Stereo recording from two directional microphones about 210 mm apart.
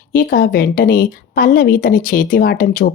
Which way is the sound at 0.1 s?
40° left (ahead or behind).